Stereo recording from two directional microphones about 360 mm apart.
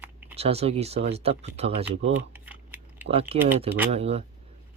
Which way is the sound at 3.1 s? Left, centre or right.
Centre.